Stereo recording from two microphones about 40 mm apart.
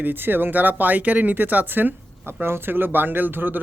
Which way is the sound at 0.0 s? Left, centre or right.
Right.